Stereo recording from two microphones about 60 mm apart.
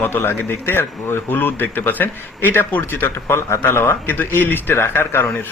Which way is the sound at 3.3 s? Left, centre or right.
Left.